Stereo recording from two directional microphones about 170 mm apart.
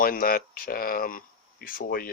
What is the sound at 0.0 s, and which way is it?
Speech, 60° left (ahead or behind).